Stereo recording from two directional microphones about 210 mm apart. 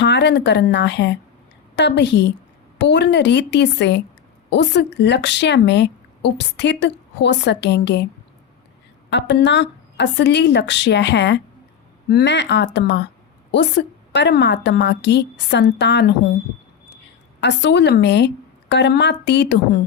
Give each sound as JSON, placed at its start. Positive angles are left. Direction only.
{"t": 0.0, "sound": "a woman's voice", "side_deg": 55}
{"t": 9.0, "sound": "speech", "side_deg": 55}
{"t": 17.4, "sound": "speech", "side_deg": 55}